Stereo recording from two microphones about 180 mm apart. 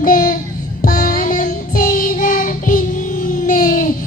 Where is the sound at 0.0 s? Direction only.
50° left (ahead or behind).